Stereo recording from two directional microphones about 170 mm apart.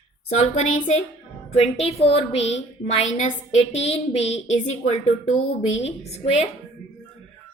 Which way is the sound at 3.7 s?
40° left (ahead or behind).